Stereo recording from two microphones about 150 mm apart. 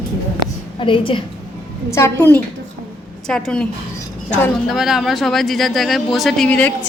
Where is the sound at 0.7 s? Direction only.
35° left (ahead or behind).